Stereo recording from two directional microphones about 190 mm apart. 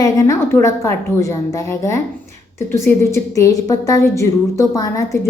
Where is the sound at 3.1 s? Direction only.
15° left (ahead or behind).